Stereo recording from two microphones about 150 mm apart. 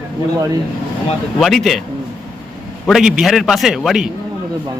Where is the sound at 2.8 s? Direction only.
Centre (ahead or behind).